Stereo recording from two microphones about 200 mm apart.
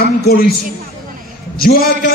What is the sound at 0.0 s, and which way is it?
Speech, 50° left (ahead or behind).